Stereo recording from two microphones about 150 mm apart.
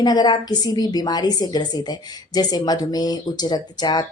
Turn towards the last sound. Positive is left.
turn(degrees=25)  # may be behind; listen again after turning